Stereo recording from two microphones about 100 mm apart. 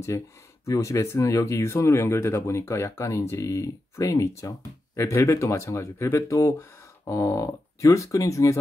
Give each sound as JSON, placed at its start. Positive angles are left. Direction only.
{"t": 0.1, "sound": "speech", "side_deg": 30}